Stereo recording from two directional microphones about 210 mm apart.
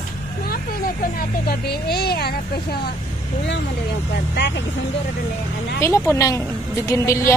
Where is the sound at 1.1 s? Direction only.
45° left (ahead or behind).